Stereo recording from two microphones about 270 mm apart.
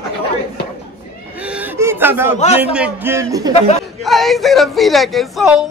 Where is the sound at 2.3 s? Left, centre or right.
Left.